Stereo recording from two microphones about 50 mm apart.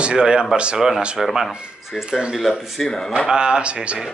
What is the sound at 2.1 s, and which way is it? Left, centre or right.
Speech, centre.